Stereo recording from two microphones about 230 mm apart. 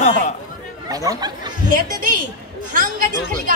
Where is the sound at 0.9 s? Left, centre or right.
Centre.